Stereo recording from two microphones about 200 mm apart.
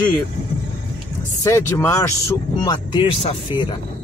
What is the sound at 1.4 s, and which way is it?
Speech, 15° left (ahead or behind).